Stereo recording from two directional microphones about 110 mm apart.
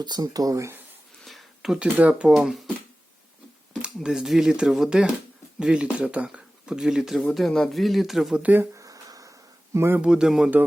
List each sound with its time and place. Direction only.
0.0 s speech: 35° right (ahead or behind)
1.2 s speech: centre (ahead or behind)
3.7 s speech: 10° right (ahead or behind)
8.4 s speech: 15° right (ahead or behind)
8.7 s a sound: 30° right (ahead or behind)
10.0 s speech: 5° right (ahead or behind)